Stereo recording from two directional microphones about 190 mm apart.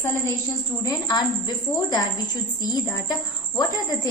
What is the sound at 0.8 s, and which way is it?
A woman's voice, 20° left (ahead or behind).